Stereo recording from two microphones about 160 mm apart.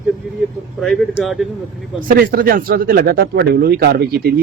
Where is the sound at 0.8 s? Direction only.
Centre (ahead or behind).